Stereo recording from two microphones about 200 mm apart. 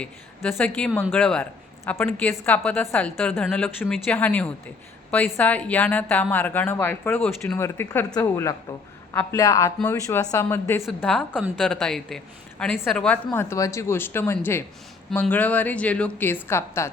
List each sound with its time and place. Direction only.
0.0 s a woman's voice: 5° left (ahead or behind)